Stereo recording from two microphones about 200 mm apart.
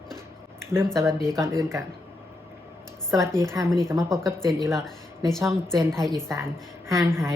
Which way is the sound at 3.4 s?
15° right (ahead or behind).